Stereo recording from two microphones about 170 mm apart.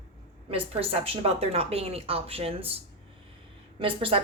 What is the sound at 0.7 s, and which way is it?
A woman's voice, 35° right (ahead or behind).